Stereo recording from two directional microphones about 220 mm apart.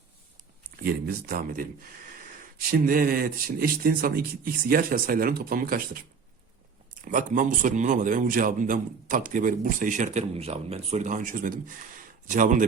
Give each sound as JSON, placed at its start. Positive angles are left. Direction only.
{"t": 0.9, "sound": "speech", "side_deg": -45}
{"t": 7.0, "sound": "speech", "side_deg": -35}